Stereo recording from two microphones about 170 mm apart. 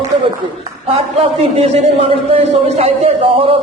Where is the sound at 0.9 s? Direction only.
40° right (ahead or behind).